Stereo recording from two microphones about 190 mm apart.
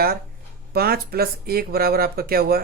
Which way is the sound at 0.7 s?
55° right (ahead or behind).